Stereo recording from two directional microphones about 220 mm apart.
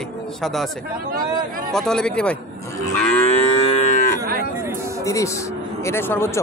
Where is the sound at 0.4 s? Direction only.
Centre (ahead or behind).